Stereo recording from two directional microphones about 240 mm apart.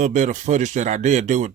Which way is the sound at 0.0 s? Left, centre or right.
Right.